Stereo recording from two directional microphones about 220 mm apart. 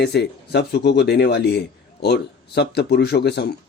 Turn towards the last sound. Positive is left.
turn(degrees=50)  # may be behind; listen again after turning